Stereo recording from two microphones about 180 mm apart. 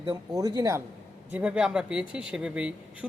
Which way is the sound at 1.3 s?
5° right (ahead or behind).